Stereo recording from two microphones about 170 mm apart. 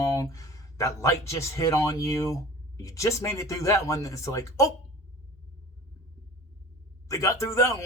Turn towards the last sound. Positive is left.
turn(degrees=15)  # may be behind; listen again after turning